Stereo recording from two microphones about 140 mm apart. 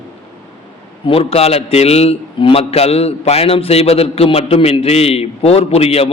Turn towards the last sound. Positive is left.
turn(degrees=45)  # may be behind; listen again after turning